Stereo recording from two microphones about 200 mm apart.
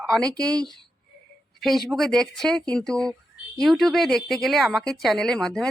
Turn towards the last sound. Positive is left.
turn(degrees=0)  # may be behind; listen again after turning